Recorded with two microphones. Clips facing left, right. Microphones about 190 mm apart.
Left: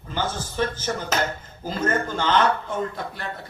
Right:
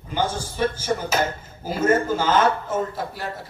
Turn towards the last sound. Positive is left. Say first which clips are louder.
# right 2 dB
turn(degrees=-5)  # may be behind; listen again after turning